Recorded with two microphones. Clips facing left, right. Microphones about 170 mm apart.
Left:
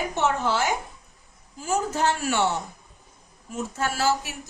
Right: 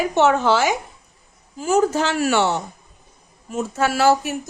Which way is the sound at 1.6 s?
80° right.